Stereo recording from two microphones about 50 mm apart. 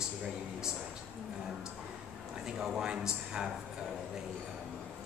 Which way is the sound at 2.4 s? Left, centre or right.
Centre.